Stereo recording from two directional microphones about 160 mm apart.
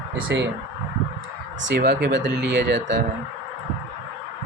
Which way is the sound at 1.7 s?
90° right.